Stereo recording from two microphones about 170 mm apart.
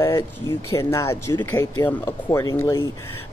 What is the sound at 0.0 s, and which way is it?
Speech, 15° left (ahead or behind).